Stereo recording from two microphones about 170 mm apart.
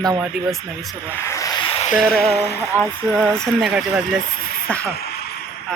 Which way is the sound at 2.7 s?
Centre (ahead or behind).